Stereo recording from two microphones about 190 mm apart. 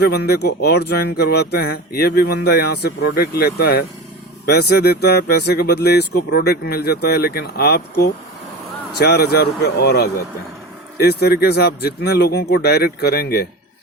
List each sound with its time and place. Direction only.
0.0 s speech: 60° left (ahead or behind)